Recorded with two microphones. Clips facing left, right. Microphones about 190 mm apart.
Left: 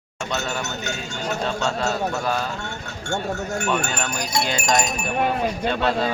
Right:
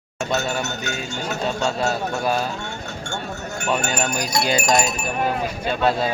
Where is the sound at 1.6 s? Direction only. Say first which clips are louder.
Right 1 dB; 10° right (ahead or behind).